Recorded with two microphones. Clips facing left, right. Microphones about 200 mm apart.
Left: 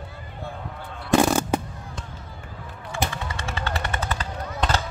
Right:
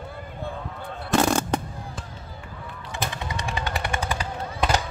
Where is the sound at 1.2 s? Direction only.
5° left (ahead or behind).